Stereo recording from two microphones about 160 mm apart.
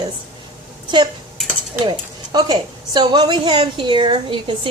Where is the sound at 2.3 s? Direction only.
25° right (ahead or behind).